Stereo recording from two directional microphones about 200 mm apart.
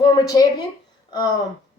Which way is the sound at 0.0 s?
20° left (ahead or behind).